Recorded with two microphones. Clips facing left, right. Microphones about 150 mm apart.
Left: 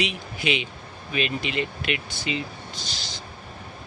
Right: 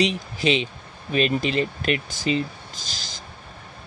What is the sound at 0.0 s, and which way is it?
Speech, 35° right (ahead or behind).